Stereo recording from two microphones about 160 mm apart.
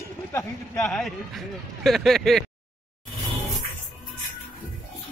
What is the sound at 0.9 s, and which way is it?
Speech, centre (ahead or behind).